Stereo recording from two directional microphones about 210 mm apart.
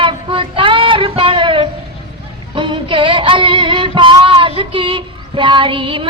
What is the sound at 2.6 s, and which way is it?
Music, 25° right (ahead or behind).